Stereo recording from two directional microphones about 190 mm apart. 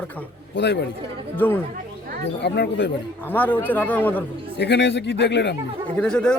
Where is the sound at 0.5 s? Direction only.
65° left (ahead or behind).